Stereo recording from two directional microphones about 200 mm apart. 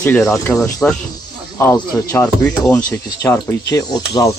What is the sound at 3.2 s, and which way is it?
Speech, 15° left (ahead or behind).